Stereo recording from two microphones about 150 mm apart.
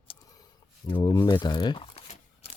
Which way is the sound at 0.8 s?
30° left (ahead or behind).